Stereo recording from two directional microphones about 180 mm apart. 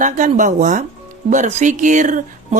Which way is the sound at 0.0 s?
45° right (ahead or behind).